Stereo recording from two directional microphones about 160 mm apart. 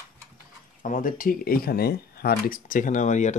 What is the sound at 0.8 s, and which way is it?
Speech, 55° left (ahead or behind).